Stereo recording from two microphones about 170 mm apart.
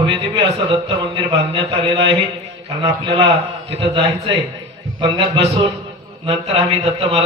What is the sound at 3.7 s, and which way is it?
A man's voice, 35° right (ahead or behind).